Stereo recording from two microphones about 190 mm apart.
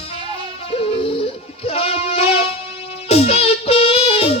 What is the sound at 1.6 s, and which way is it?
Music, 30° left (ahead or behind).